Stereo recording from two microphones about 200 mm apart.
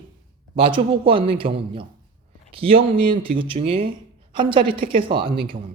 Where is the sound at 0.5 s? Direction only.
25° right (ahead or behind).